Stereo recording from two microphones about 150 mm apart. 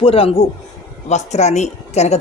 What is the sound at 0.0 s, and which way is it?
A woman's voice, 40° left (ahead or behind).